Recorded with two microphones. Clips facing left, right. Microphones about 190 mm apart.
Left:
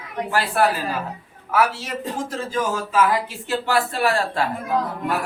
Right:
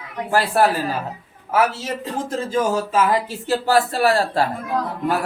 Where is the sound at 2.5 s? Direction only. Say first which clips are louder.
Right 3 dB; 25° right (ahead or behind).